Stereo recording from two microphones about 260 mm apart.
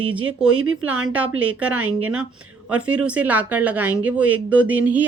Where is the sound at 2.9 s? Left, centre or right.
Centre.